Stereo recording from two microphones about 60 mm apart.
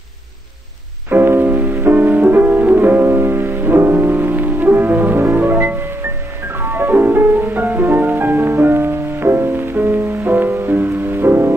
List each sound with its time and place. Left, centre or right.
1.1 s music: right